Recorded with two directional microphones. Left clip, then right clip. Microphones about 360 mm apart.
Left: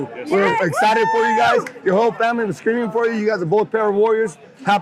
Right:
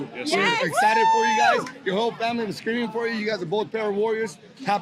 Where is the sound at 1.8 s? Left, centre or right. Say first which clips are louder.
Left 9 dB; left.